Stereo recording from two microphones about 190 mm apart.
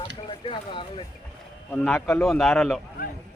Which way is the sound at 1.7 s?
5° left (ahead or behind).